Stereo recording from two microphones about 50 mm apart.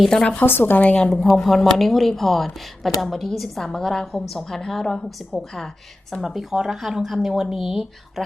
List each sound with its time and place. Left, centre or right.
0.2 s a woman's voice: left
0.4 s a woman's voice: left
0.8 s a woman's voice: left
1.4 s a woman's voice: centre
6.2 s speech: centre